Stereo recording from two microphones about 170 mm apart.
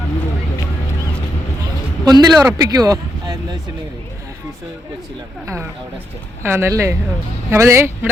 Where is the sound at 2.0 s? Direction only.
25° right (ahead or behind).